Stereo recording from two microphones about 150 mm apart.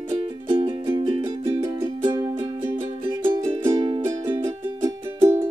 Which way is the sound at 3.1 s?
35° right (ahead or behind).